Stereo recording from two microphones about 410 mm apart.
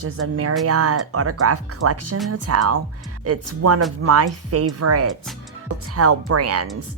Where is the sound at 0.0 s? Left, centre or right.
Right.